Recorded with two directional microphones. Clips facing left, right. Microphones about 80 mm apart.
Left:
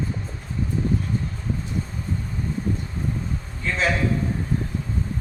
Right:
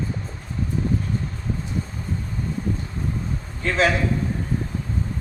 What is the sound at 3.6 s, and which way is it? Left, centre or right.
Speech, right.